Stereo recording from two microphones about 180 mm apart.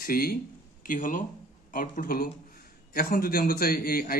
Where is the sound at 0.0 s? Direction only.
55° left (ahead or behind).